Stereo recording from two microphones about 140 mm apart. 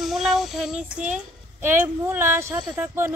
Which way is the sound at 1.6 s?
15° right (ahead or behind).